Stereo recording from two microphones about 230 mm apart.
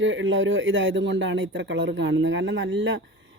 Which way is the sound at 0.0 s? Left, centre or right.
Right.